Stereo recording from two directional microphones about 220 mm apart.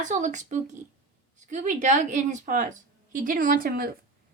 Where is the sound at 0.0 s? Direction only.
35° right (ahead or behind).